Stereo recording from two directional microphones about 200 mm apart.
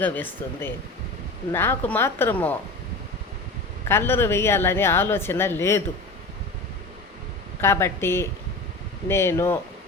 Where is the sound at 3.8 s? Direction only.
10° left (ahead or behind).